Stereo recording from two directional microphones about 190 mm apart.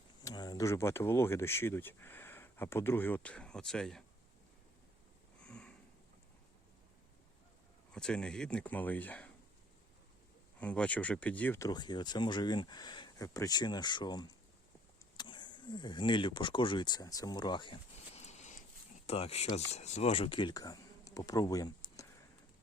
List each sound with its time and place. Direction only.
0.3 s speech: 20° left (ahead or behind); by 4.0 s 5° left (ahead or behind)
5.4 s a sound: 5° left (ahead or behind)
7.9 s speech: 5° left (ahead or behind)
10.6 s speech: 5° left (ahead or behind)